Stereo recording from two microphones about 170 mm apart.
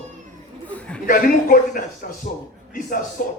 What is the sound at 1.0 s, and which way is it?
Speech, 55° left (ahead or behind).